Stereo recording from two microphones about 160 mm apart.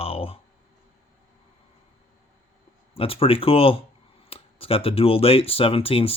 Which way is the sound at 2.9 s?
35° left (ahead or behind).